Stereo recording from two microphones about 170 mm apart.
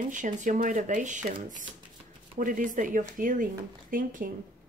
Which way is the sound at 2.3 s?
50° right (ahead or behind).